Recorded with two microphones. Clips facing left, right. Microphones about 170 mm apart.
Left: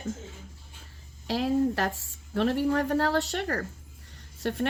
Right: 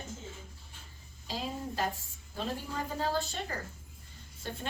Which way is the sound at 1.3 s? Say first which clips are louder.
Left 12 dB; 75° left (ahead or behind).